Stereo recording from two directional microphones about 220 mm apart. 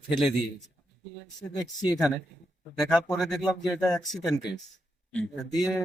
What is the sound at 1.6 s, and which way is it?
Speech, 20° left (ahead or behind).